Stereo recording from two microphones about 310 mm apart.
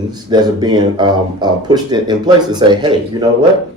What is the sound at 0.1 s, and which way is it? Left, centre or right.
Speech, centre.